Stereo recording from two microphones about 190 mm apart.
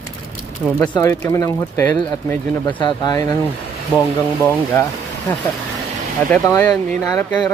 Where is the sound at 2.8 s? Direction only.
25° left (ahead or behind).